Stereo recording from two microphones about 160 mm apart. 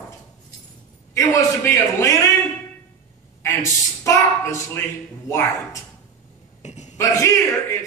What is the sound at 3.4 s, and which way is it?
Speech, 15° left (ahead or behind).